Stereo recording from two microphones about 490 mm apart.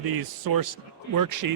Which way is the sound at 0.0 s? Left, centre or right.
Right.